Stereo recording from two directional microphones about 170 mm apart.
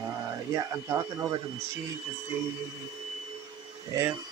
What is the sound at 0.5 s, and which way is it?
Speech, 20° right (ahead or behind).